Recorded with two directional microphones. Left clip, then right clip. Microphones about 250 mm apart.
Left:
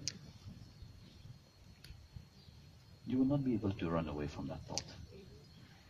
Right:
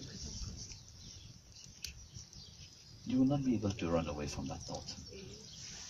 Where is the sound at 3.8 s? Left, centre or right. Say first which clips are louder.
Right 3 dB; centre.